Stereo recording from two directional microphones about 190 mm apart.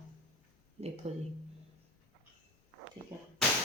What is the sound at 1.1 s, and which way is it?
Speech, 35° right (ahead or behind).